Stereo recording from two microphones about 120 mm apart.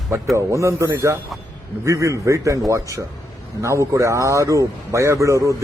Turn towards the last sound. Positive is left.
turn(degrees=-25)  # may be behind; listen again after turning